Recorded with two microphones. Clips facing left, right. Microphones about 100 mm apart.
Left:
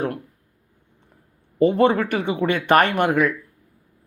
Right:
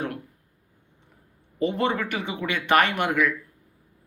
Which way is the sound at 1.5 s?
45° left (ahead or behind).